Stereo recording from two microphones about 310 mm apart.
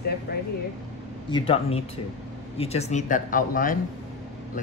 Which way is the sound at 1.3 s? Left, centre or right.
Centre.